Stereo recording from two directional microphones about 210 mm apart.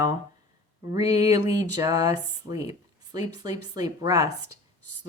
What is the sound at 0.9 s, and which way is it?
A woman's voice, 15° right (ahead or behind).